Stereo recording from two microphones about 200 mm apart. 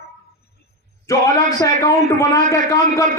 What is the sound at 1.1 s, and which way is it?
A man's voice, 15° left (ahead or behind).